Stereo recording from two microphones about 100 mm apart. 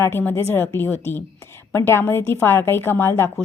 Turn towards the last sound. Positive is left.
turn(degrees=25)  # may be behind; listen again after turning